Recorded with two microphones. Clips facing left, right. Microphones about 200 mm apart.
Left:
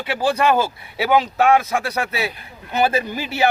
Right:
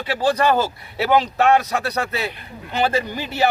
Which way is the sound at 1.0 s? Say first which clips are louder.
Even; centre (ahead or behind).